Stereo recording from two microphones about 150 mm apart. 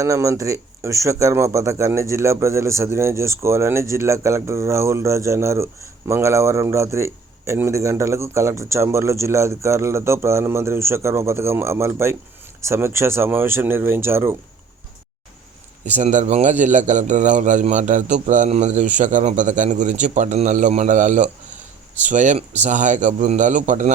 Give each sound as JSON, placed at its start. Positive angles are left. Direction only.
{"t": 0.0, "sound": "a man's voice", "side_deg": -20}
{"t": 16.0, "sound": "a man's voice", "side_deg": -50}